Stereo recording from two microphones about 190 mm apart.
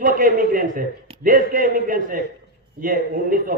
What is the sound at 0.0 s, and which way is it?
A man's voice, 45° right (ahead or behind).